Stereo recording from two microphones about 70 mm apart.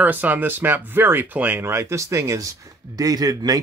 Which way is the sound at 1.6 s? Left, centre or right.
Right.